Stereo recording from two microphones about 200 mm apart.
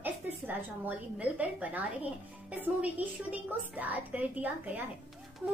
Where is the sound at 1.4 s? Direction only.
10° right (ahead or behind).